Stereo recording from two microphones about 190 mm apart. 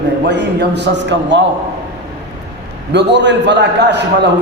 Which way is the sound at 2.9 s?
65° right (ahead or behind).